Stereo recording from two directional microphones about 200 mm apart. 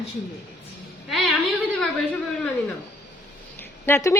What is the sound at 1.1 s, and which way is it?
Speech, centre (ahead or behind).